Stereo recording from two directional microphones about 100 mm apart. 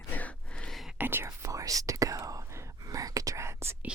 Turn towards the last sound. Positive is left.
turn(degrees=-25)  # may be behind; listen again after turning